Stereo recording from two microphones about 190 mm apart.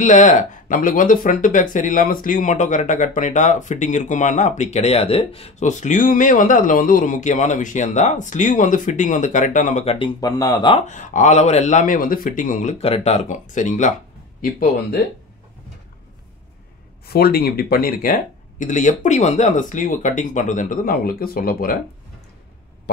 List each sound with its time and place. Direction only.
0.0 s speech: 40° left (ahead or behind); by 10.8 s 20° left (ahead or behind)
10.9 s speech: 40° left (ahead or behind)
17.0 s speech: 55° left (ahead or behind)